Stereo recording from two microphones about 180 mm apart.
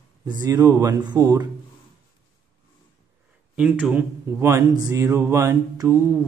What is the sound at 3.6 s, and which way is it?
Speech, 5° right (ahead or behind).